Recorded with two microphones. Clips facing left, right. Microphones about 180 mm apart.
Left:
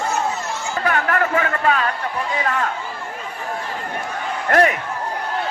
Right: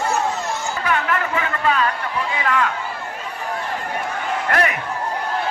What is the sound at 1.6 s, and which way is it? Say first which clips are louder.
Speech: right 3 dB; 45° left (ahead or behind).